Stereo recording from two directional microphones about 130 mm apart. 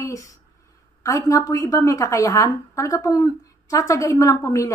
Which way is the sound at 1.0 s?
25° left (ahead or behind).